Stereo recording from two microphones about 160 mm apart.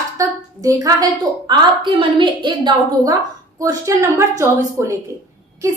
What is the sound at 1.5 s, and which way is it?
A woman's voice, 30° right (ahead or behind).